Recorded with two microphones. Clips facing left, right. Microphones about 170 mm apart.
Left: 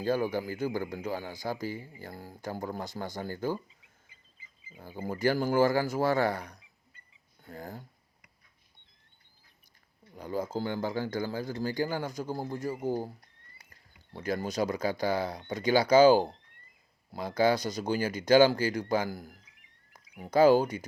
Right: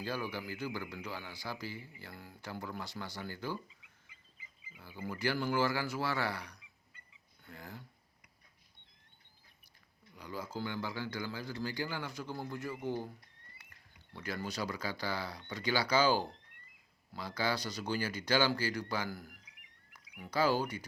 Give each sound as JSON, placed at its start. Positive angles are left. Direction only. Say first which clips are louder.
{"t": 0.0, "sound": "speech", "louder": "left 10 dB", "side_deg": 45}
{"t": 3.8, "sound": "fowl", "louder": "left 1 dB", "side_deg": 30}
{"t": 4.8, "sound": "speech", "louder": "left 8 dB", "side_deg": 45}
{"t": 10.2, "sound": "speech", "louder": "left 8 dB", "side_deg": 45}